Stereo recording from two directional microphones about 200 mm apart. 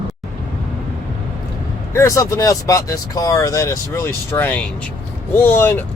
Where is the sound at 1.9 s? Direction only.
15° left (ahead or behind).